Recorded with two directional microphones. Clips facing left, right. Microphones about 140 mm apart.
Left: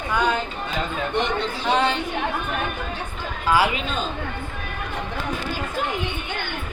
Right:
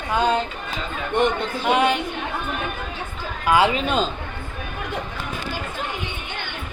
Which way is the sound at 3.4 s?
20° right (ahead or behind).